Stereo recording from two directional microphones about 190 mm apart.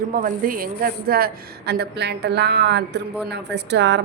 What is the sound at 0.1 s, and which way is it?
Speech, 50° right (ahead or behind).